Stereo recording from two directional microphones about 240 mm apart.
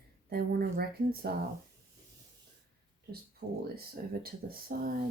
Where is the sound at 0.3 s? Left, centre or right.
Right.